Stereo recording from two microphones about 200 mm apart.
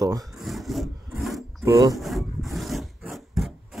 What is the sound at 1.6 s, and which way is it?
Speech, 15° right (ahead or behind).